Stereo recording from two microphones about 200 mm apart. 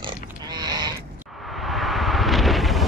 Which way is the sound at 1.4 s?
Centre (ahead or behind).